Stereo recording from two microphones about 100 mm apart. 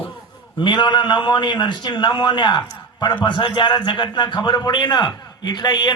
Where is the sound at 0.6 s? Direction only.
50° left (ahead or behind).